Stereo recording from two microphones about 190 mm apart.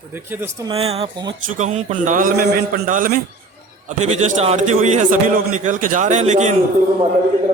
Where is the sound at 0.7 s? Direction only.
30° right (ahead or behind).